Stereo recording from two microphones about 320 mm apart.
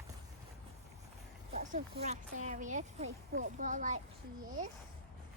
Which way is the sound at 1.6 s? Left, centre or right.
Right.